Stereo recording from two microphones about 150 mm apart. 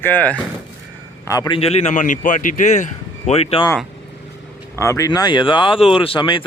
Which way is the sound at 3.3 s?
40° left (ahead or behind).